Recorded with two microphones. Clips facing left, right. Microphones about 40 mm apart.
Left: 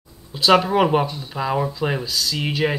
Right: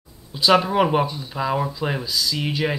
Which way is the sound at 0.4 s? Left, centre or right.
Centre.